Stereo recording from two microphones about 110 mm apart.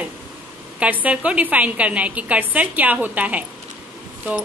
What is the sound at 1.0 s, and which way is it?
A woman's voice, 10° right (ahead or behind).